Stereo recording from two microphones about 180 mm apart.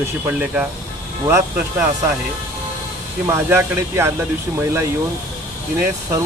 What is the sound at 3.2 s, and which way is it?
Speech, 15° right (ahead or behind).